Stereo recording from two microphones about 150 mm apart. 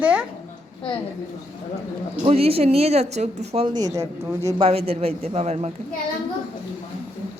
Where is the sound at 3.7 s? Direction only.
25° right (ahead or behind).